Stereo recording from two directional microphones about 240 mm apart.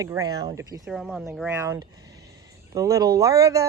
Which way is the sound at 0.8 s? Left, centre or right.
Centre.